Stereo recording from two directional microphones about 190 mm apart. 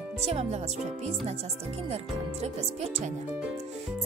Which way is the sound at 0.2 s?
30° right (ahead or behind).